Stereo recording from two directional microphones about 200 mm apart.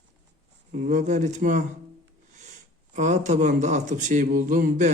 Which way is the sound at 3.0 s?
35° right (ahead or behind).